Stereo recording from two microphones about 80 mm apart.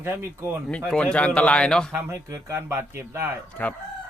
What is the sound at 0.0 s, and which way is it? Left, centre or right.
Speech, right.